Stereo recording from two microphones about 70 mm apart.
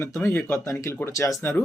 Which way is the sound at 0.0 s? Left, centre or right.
Left.